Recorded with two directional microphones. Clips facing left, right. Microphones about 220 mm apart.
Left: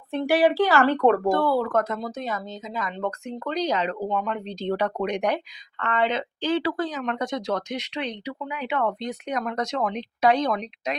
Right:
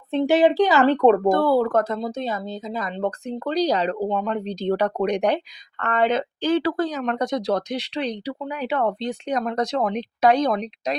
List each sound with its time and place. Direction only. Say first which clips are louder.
0.1 s speech: right 3 dB; 20° right (ahead or behind)
1.3 s speech: right 4 dB; 40° right (ahead or behind)
5.8 s speech: right 4 dB; 45° right (ahead or behind)